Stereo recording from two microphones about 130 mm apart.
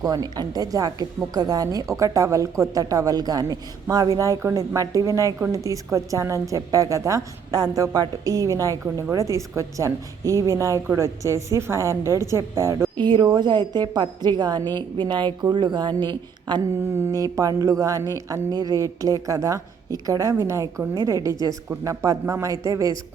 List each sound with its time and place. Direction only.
0.0 s a woman's voice: 30° right (ahead or behind)
13.0 s a woman's voice: 35° right (ahead or behind)
16.9 s a woman's voice: 25° right (ahead or behind)